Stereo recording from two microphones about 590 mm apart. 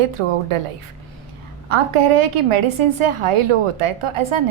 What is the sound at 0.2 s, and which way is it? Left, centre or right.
Speech, right.